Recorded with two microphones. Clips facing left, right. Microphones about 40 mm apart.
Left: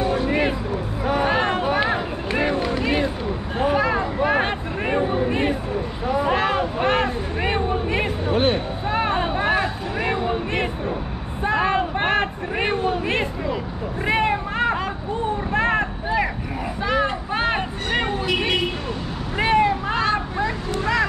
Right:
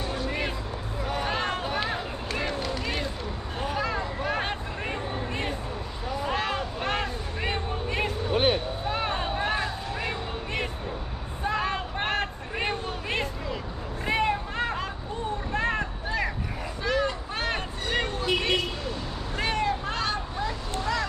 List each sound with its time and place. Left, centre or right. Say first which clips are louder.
0.0 s music: left 9 dB; left
1.0 s run: left 8 dB; left
3.5 s a sound: left 9 dB; left
6.0 s vehicle: left 8 dB; left
8.5 s a sound: left 6 dB; left
14.0 s hubbub: left 5 dB; left
15.5 s vehicle: left 7 dB; left
19.3 s vehicle: left 9 dB; left
20.8 s a sound: left 8 dB; left